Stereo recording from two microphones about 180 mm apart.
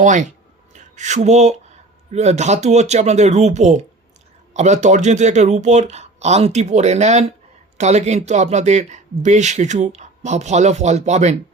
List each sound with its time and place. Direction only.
0.0 s speech: 45° right (ahead or behind)